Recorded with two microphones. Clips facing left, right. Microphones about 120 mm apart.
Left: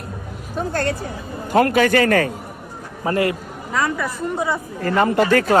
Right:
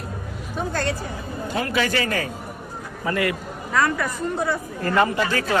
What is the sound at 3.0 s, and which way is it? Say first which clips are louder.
Speech: left 4 dB; 35° left (ahead or behind).